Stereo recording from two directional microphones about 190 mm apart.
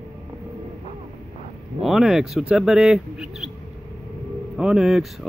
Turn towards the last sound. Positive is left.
turn(degrees=0)  # may be behind; listen again after turning